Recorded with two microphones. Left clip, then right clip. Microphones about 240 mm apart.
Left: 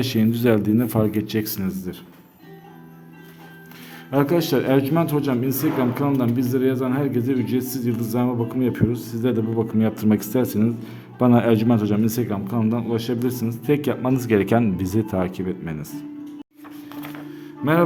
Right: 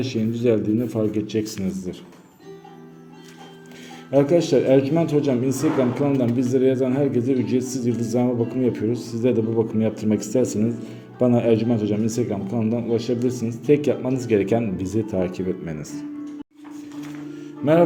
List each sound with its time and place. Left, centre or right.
0.0 s speech: left
4.1 s a man's voice: centre
17.3 s music: centre